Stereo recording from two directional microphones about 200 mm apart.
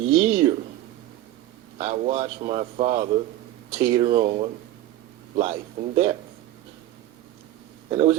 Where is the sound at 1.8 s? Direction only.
30° right (ahead or behind).